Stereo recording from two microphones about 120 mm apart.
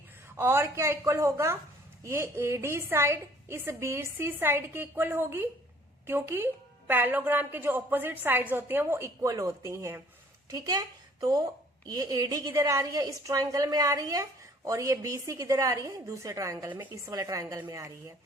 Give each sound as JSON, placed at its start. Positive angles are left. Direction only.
{"t": 0.3, "sound": "a woman's voice", "side_deg": -20}
{"t": 10.5, "sound": "a woman's voice", "side_deg": -35}
{"t": 16.6, "sound": "a woman's voice", "side_deg": -15}
{"t": 16.9, "sound": "a woman's voice", "side_deg": -30}